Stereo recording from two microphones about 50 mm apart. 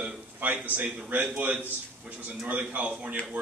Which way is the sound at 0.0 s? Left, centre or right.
Right.